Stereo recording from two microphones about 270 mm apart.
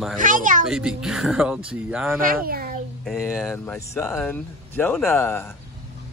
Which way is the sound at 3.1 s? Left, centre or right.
Centre.